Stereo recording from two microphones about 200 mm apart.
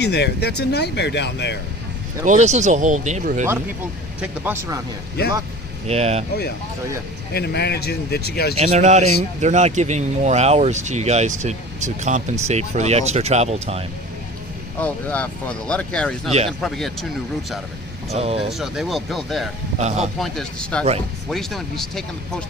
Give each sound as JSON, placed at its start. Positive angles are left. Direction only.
{"t": 0.0, "sound": "speech", "side_deg": 55}
{"t": 2.2, "sound": "speech", "side_deg": -35}
{"t": 4.2, "sound": "speech", "side_deg": -10}
{"t": 5.9, "sound": "speech", "side_deg": -30}
{"t": 7.3, "sound": "a man's voice", "side_deg": 55}
{"t": 8.5, "sound": "speech", "side_deg": -30}
{"t": 14.8, "sound": "speech", "side_deg": 5}
{"t": 18.1, "sound": "speech", "side_deg": -30}
{"t": 18.5, "sound": "speech", "side_deg": 0}